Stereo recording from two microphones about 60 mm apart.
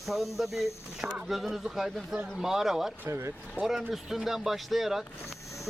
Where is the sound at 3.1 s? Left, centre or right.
Right.